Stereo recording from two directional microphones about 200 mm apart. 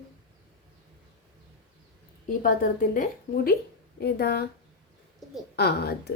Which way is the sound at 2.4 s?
45° left (ahead or behind).